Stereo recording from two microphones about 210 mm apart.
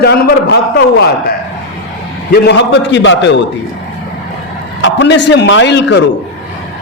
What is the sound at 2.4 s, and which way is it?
A man's voice, 55° left (ahead or behind).